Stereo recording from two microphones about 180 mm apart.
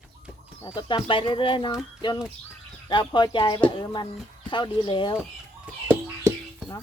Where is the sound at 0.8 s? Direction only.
25° left (ahead or behind).